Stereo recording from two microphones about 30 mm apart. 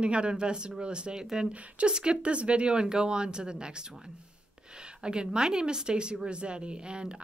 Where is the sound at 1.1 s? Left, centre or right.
Centre.